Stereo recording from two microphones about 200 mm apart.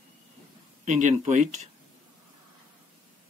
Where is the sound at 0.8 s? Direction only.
35° right (ahead or behind).